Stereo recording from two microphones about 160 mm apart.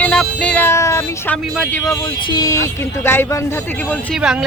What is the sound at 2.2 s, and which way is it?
Speech, 25° left (ahead or behind).